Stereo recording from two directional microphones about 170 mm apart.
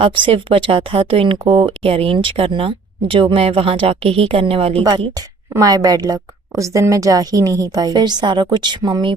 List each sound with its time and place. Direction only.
0.0 s speech: 30° right (ahead or behind)
4.8 s a woman's voice: 25° right (ahead or behind)